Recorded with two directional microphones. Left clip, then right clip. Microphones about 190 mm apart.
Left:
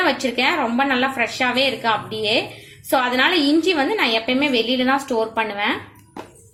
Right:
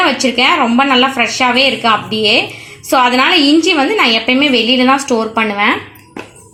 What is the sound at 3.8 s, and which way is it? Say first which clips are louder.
A woman's voice: right 8 dB; 35° right (ahead or behind).